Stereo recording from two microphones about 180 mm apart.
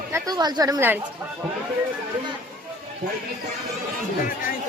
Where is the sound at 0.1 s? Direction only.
20° right (ahead or behind).